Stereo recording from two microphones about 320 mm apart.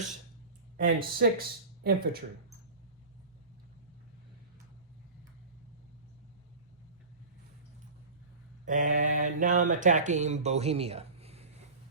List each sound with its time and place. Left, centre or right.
0.8 s speech: right
8.6 s speech: right